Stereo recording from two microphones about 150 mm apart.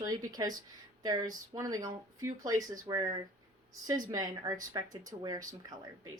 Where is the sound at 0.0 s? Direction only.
25° right (ahead or behind).